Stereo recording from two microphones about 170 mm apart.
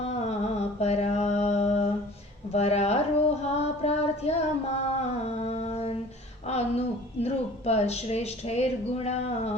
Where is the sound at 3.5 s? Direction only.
40° left (ahead or behind).